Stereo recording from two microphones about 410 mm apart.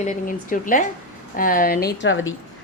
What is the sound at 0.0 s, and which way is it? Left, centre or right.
A woman's voice, centre.